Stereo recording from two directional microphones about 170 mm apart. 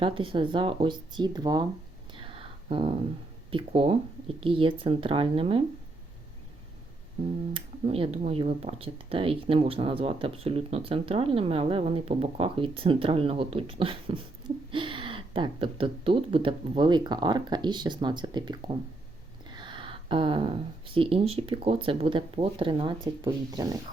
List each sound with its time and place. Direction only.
0.0 s speech: 30° right (ahead or behind)
2.1 s a sound: 30° right (ahead or behind)
3.5 s speech: 30° right (ahead or behind)
7.5 s speech: 30° right (ahead or behind)